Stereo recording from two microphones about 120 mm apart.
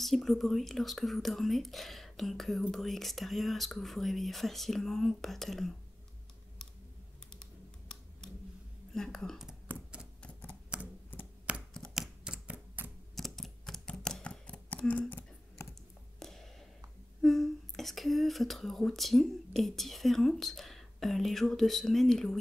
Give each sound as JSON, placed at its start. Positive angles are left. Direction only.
{"t": 0.0, "sound": "speech", "side_deg": 0}
{"t": 8.9, "sound": "speech", "side_deg": 5}
{"t": 9.7, "sound": "typewriter", "side_deg": -15}
{"t": 11.7, "sound": "scissors", "side_deg": 0}
{"t": 13.1, "sound": "typewriter", "side_deg": 0}
{"t": 16.2, "sound": "a sound", "side_deg": 5}
{"t": 17.2, "sound": "speech", "side_deg": 0}